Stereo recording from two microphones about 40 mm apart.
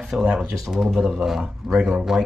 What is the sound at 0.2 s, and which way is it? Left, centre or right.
Speech, right.